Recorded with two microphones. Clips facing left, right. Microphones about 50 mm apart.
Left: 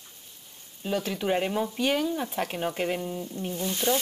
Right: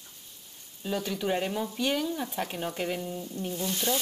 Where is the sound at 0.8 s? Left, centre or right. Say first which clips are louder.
Left 2 dB; centre.